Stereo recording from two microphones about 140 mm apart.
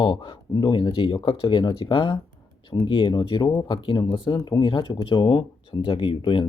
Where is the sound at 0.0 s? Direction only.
35° left (ahead or behind).